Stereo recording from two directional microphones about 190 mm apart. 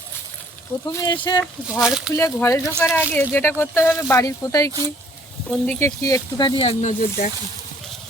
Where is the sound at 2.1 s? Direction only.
15° left (ahead or behind).